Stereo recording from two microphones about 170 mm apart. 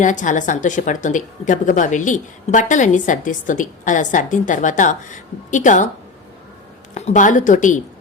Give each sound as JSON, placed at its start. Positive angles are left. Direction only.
{"t": 0.0, "sound": "a woman's voice", "side_deg": 45}
{"t": 6.9, "sound": "a woman's voice", "side_deg": 45}